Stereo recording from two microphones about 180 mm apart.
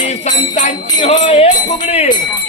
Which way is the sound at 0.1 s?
40° left (ahead or behind).